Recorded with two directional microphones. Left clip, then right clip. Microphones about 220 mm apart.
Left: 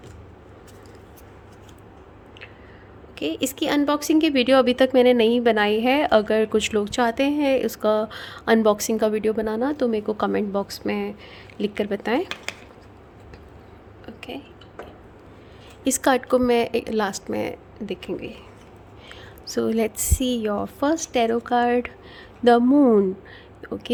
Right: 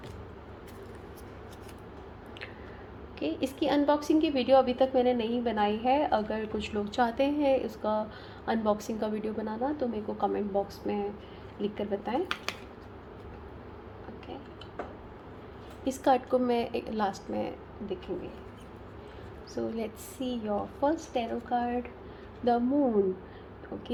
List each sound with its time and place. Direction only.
3.2 s a woman's voice: 35° left (ahead or behind)
15.8 s a woman's voice: 40° left (ahead or behind)
19.5 s a woman's voice: 45° left (ahead or behind)